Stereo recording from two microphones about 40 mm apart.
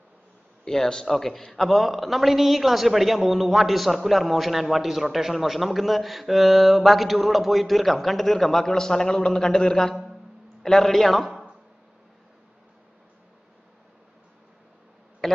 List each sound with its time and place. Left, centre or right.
0.7 s a man's voice: centre
1.0 s a man's voice: centre
15.2 s a sound: centre